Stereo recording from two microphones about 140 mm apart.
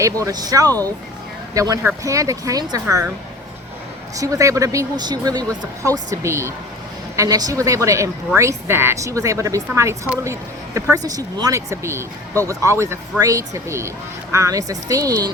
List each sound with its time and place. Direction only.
0.0 s speech: 25° right (ahead or behind)
4.2 s speech: 25° right (ahead or behind)